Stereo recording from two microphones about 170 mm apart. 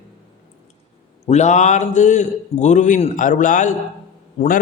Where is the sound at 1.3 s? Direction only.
45° left (ahead or behind).